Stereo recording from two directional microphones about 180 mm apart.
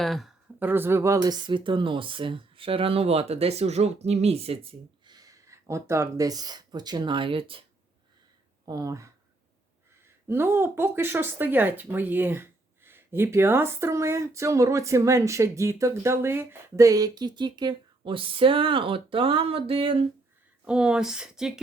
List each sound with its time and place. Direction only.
0.0 s speech: centre (ahead or behind)
0.6 s speech: 10° right (ahead or behind); by 7.6 s 30° right (ahead or behind)
8.6 s speech: 20° right (ahead or behind)
10.2 s speech: 15° right (ahead or behind); by 20.1 s 30° right (ahead or behind)
20.7 s speech: 5° right (ahead or behind)